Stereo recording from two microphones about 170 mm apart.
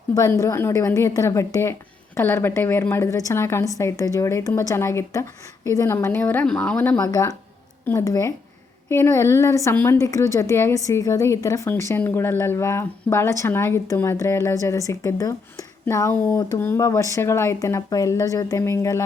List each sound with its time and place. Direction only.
0.1 s a woman's voice: 20° left (ahead or behind)